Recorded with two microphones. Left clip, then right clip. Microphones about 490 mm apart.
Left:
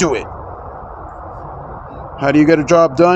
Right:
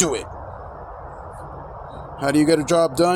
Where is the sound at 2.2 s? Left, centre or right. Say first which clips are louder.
Left 6 dB; right.